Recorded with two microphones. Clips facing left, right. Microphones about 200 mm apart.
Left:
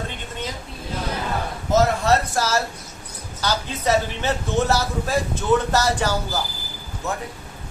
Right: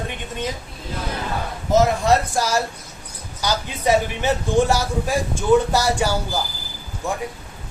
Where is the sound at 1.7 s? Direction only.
15° right (ahead or behind).